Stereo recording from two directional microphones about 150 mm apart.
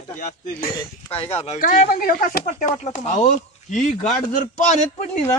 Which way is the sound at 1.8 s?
70° left (ahead or behind).